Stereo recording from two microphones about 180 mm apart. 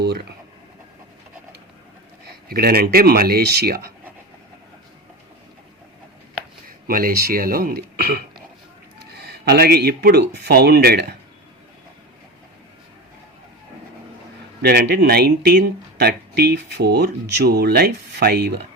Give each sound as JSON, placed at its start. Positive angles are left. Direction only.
{"t": 0.0, "sound": "speech", "side_deg": -65}
{"t": 2.5, "sound": "speech", "side_deg": -55}
{"t": 6.8, "sound": "speech", "side_deg": -55}
{"t": 14.6, "sound": "speech", "side_deg": -65}